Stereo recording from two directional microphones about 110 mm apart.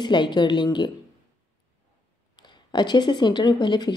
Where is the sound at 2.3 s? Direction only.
45° left (ahead or behind).